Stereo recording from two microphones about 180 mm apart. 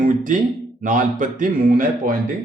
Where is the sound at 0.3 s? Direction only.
45° right (ahead or behind).